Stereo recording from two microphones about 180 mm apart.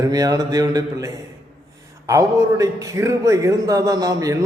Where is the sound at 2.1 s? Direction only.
15° right (ahead or behind).